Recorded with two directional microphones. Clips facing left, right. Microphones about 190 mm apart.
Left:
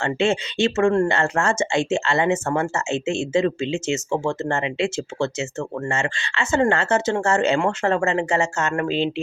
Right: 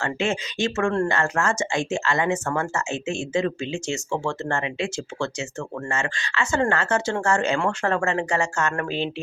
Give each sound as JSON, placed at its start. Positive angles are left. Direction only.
{"t": 0.0, "sound": "speech", "side_deg": 25}